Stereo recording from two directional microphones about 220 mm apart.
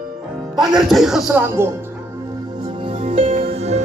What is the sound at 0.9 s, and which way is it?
Speech, centre (ahead or behind).